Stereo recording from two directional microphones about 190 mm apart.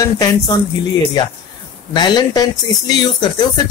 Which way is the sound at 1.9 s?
25° left (ahead or behind).